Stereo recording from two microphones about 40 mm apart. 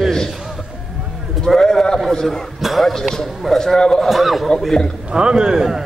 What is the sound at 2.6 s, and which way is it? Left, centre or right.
A man's voice, centre.